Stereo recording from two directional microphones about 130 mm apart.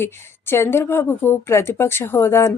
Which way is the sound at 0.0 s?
20° left (ahead or behind).